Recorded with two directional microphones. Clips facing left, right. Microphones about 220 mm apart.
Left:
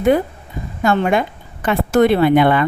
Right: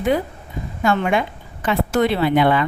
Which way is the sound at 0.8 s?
40° left (ahead or behind).